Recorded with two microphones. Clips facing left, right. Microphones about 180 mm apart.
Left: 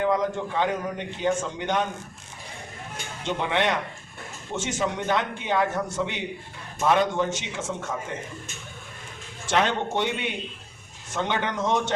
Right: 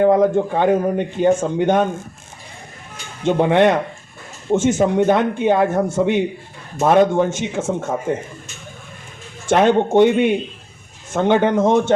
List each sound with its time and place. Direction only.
0.0 s a man's voice: 55° right (ahead or behind)
3.2 s a man's voice: 50° right (ahead or behind)
9.5 s a man's voice: 50° right (ahead or behind)